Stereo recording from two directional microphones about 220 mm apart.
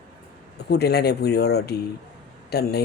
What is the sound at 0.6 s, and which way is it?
Speech, 50° left (ahead or behind).